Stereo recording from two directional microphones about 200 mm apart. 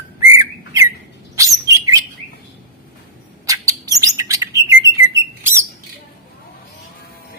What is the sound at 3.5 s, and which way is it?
Chirp, 15° right (ahead or behind).